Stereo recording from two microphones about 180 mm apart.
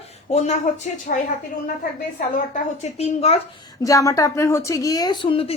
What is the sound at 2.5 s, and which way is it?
Speech, 35° left (ahead or behind).